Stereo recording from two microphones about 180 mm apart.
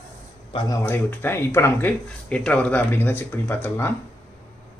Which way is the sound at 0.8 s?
10° left (ahead or behind).